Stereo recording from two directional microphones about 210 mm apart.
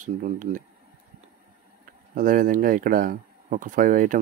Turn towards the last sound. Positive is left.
turn(degrees=-40)  # may be behind; listen again after turning